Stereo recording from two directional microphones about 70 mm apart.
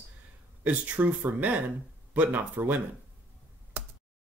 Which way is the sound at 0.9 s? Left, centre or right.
Right.